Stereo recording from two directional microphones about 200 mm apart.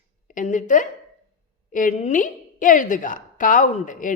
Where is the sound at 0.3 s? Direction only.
40° left (ahead or behind).